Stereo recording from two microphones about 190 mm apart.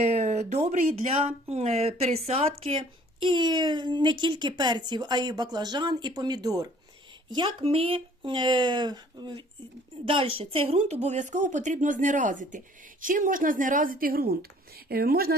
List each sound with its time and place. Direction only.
0.1 s a woman's voice: 35° right (ahead or behind); by 15.4 s 55° right (ahead or behind)